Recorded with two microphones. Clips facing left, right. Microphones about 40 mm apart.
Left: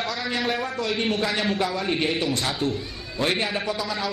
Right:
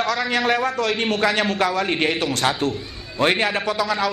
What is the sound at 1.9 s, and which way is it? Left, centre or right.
A man's voice, right.